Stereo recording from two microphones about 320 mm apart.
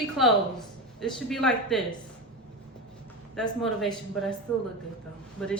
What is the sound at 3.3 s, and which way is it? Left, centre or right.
A woman's voice, centre.